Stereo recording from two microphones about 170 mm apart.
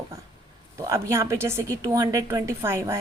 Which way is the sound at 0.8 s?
15° right (ahead or behind).